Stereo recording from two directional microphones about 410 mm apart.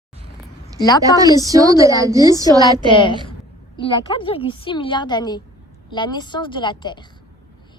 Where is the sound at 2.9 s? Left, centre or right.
Centre.